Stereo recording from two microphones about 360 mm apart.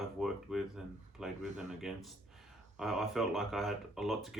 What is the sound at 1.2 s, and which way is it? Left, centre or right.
Speech, centre.